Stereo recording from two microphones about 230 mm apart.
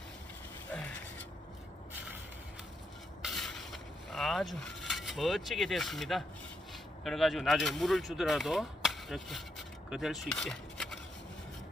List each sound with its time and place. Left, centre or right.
3.2 s vehicle: centre
7.0 s speech: centre